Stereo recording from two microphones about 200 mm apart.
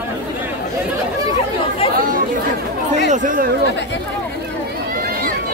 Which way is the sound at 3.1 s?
40° right (ahead or behind).